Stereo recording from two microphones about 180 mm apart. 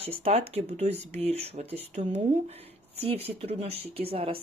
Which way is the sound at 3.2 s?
35° right (ahead or behind).